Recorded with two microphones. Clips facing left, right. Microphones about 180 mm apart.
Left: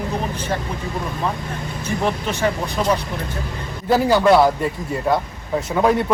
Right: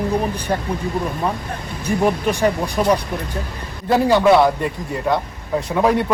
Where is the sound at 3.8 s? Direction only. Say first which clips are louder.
Right 1 dB; centre (ahead or behind).